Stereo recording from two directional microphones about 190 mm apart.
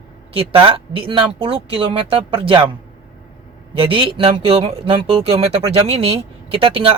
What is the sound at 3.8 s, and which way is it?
Speech, 30° right (ahead or behind).